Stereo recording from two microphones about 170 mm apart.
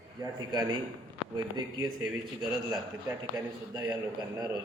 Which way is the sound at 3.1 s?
20° right (ahead or behind).